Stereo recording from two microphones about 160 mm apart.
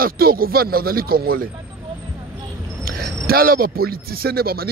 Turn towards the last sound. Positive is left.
turn(degrees=-70)  # may be behind; listen again after turning